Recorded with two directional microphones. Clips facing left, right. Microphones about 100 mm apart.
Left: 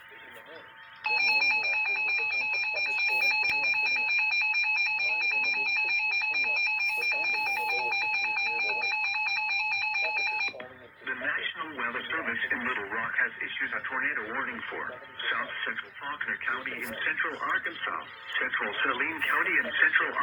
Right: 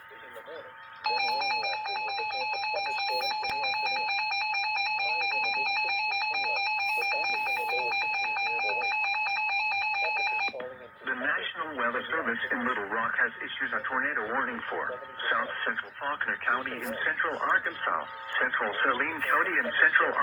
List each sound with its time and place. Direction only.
1.6 s music: 25° right (ahead or behind)
2.0 s doorbell: 40° right (ahead or behind)
3.1 s a sound: 30° right (ahead or behind)
3.5 s doorbell: 10° right (ahead or behind)
3.8 s music: 40° right (ahead or behind)
7.4 s ringtone: 15° right (ahead or behind)
7.9 s doorbell: 40° right (ahead or behind)
8.4 s music: 40° right (ahead or behind)
11.1 s radio: 35° right (ahead or behind)
11.6 s speech: 20° right (ahead or behind); by 16.9 s 40° right (ahead or behind)
16.9 s speech: 20° right (ahead or behind)
19.0 s speech: 15° right (ahead or behind)